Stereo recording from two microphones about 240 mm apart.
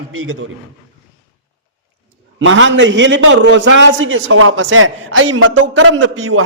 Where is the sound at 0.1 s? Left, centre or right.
Right.